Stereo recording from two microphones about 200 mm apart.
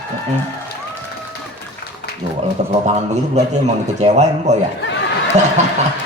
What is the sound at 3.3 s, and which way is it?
A man's voice, 35° right (ahead or behind).